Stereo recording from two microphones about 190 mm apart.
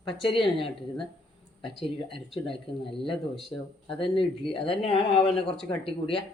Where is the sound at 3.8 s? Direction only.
30° left (ahead or behind).